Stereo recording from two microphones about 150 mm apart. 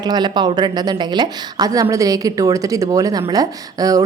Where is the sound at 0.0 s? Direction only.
30° right (ahead or behind).